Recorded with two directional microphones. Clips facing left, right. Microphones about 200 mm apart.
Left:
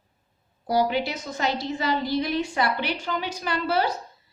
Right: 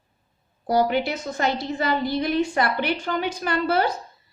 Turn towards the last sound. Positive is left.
turn(degrees=-55)  # may be behind; listen again after turning